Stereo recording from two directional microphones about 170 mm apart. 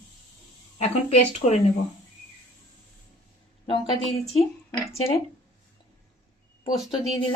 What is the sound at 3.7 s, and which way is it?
Speech, 35° left (ahead or behind).